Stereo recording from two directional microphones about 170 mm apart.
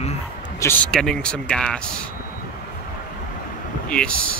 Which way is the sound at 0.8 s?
5° left (ahead or behind).